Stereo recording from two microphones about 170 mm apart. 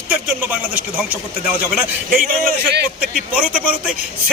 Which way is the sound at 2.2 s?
55° right (ahead or behind).